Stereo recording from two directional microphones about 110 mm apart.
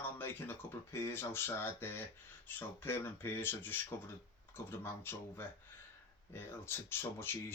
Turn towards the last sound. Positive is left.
turn(degrees=20)  # may be behind; listen again after turning